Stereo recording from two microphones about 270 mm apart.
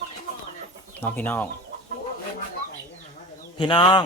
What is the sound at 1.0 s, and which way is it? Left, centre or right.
Speech, centre.